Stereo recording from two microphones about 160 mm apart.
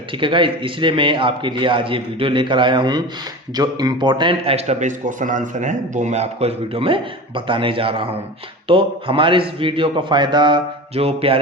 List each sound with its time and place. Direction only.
0.2 s a man's voice: 30° right (ahead or behind)